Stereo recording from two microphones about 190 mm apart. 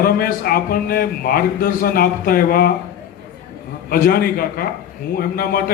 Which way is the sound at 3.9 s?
50° left (ahead or behind).